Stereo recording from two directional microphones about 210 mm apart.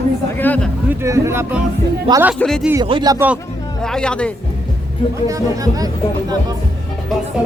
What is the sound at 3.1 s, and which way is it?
Speech, 10° right (ahead or behind).